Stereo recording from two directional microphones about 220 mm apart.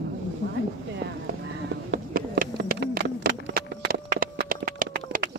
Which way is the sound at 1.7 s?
45° right (ahead or behind).